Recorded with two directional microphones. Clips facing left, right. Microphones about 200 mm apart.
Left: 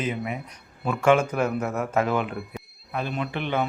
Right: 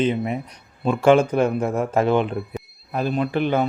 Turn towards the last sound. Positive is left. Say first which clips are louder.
# right 6 dB
turn(degrees=-40)  # may be behind; listen again after turning